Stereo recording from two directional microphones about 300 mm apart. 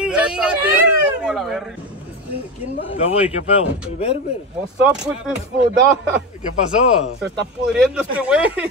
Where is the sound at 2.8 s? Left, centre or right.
Left.